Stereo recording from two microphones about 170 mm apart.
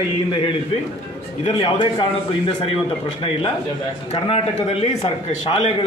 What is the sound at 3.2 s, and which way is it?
Speech, 30° left (ahead or behind).